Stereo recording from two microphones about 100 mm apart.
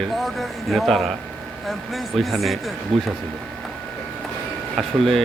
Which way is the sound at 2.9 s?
70° right (ahead or behind).